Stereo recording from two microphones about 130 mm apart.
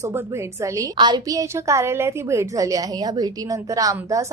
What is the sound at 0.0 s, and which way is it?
Speech, 20° right (ahead or behind).